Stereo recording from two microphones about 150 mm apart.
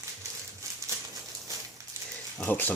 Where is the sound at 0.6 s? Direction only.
20° right (ahead or behind).